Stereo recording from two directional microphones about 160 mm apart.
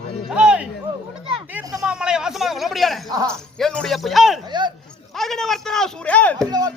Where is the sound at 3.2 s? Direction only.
5° left (ahead or behind).